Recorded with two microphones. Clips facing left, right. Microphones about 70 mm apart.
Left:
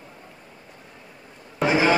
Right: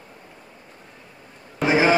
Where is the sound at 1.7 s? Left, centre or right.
Right.